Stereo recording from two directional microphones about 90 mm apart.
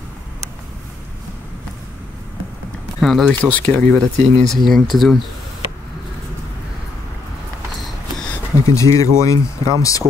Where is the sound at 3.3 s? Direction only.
15° left (ahead or behind).